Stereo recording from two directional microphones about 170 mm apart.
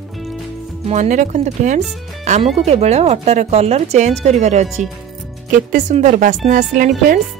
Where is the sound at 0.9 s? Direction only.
45° right (ahead or behind).